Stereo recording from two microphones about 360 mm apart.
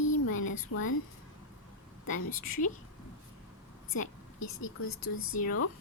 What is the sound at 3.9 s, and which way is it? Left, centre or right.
A woman's voice, left.